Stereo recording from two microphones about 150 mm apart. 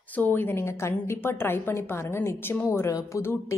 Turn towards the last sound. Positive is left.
turn(degrees=20)  # may be behind; listen again after turning